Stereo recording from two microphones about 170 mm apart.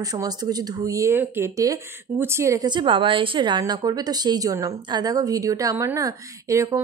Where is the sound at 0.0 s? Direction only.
20° right (ahead or behind).